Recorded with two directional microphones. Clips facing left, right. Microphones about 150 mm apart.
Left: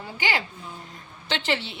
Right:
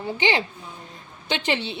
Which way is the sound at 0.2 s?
20° right (ahead or behind).